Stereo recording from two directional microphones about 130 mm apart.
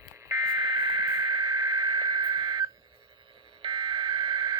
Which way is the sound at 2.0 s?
35° right (ahead or behind).